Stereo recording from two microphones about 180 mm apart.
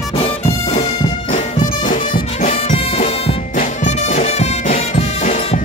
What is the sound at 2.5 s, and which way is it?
Music, 30° left (ahead or behind).